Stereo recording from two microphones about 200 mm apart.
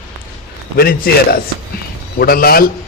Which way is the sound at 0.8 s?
50° left (ahead or behind).